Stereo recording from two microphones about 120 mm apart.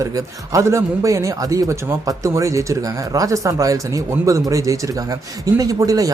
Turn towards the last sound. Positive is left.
turn(degrees=-30)  # may be behind; listen again after turning